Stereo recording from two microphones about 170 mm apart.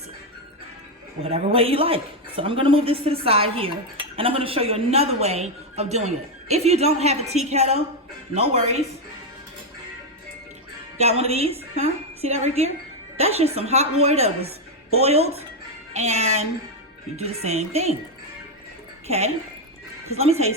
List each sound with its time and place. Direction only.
1.2 s a woman's voice: 35° right (ahead or behind)
11.0 s a woman's voice: 35° right (ahead or behind)
19.0 s a woman's voice: 40° right (ahead or behind)